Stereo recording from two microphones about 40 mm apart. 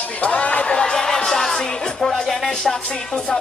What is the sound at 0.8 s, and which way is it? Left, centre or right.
Music, centre.